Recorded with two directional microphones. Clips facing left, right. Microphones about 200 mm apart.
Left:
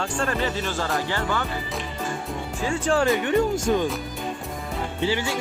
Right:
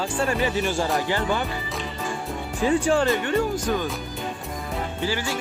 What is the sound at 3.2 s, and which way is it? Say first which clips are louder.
Speech: left 2 dB; 20° left (ahead or behind).